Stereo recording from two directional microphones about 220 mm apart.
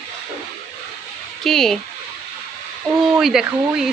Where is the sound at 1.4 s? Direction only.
Centre (ahead or behind).